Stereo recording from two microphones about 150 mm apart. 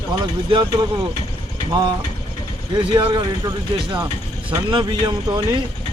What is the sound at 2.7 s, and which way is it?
Speech, 30° right (ahead or behind).